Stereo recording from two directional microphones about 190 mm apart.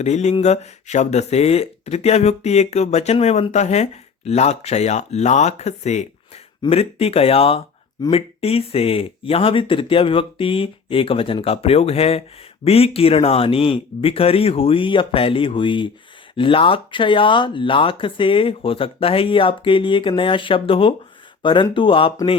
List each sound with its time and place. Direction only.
0.0 s speech: 35° left (ahead or behind)